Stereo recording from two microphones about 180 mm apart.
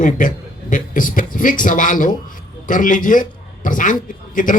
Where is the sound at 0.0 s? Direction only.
45° left (ahead or behind).